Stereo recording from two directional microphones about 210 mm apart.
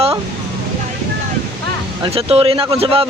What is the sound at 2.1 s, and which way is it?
Speech, 25° right (ahead or behind).